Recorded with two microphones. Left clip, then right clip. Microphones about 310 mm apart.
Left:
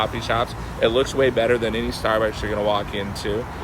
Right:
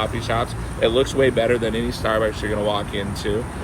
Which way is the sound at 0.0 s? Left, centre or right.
Left.